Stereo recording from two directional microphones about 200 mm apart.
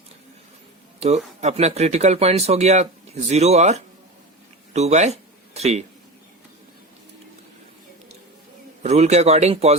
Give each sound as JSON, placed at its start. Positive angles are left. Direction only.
{"t": 0.9, "sound": "speech", "side_deg": -35}
{"t": 8.8, "sound": "speech", "side_deg": -35}